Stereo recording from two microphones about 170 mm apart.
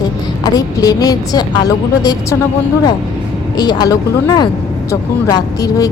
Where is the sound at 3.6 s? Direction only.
25° left (ahead or behind).